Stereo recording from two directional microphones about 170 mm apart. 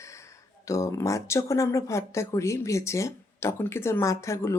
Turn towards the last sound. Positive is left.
turn(degrees=15)  # may be behind; listen again after turning